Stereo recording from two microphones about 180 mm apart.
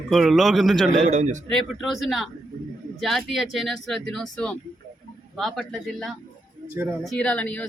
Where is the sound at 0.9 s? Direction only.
40° right (ahead or behind).